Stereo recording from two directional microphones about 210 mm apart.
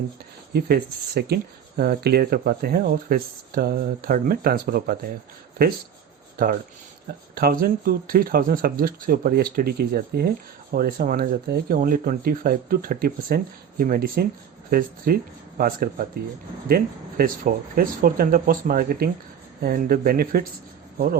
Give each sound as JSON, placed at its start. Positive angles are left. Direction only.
{"t": 0.5, "sound": "speech", "side_deg": -50}
{"t": 6.3, "sound": "speech", "side_deg": -45}